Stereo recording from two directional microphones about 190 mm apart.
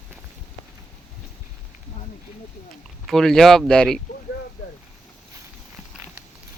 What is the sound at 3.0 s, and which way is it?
Speech, centre (ahead or behind).